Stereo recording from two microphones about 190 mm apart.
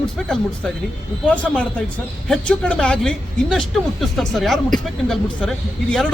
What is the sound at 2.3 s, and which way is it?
Speech, 5° left (ahead or behind).